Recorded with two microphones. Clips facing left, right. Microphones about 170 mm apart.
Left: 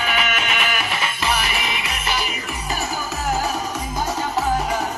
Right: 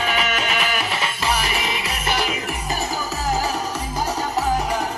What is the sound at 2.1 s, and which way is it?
Music, 85° right.